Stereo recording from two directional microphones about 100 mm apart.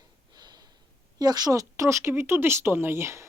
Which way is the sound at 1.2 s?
40° right (ahead or behind).